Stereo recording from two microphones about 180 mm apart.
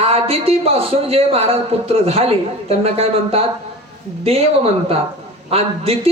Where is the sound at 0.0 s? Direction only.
30° right (ahead or behind).